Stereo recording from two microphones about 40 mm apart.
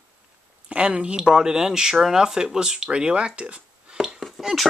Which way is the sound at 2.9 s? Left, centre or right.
Right.